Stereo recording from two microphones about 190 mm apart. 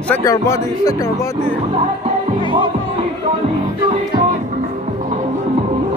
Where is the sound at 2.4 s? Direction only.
25° right (ahead or behind).